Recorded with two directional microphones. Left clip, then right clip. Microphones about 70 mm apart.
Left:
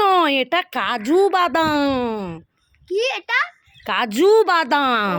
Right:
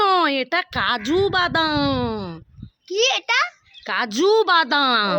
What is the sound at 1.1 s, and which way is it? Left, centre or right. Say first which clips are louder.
Speech: left 5 dB; left.